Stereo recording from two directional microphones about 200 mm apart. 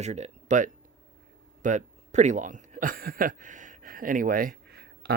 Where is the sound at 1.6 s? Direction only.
35° right (ahead or behind).